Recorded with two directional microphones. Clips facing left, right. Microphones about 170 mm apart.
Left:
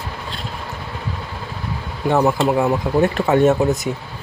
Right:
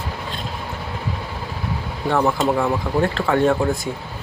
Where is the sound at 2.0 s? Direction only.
15° left (ahead or behind).